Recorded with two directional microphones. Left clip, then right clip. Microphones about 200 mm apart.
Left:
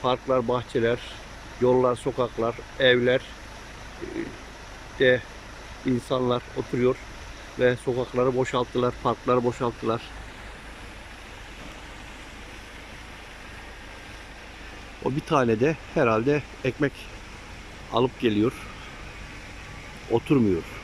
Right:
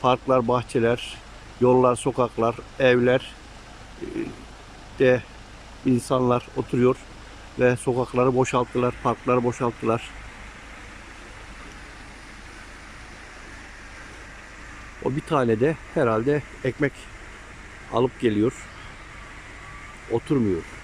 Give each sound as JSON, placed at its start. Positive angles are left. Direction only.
{"t": 0.0, "sound": "speech", "side_deg": -10}
{"t": 4.9, "sound": "speech", "side_deg": -5}
{"t": 15.0, "sound": "speech", "side_deg": 0}
{"t": 17.9, "sound": "speech", "side_deg": 0}
{"t": 20.1, "sound": "speech", "side_deg": 5}